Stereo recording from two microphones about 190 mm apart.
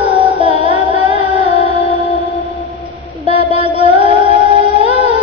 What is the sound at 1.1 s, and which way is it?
Music, 35° left (ahead or behind).